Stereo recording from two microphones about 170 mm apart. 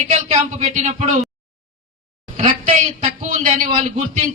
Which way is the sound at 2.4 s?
50° right (ahead or behind).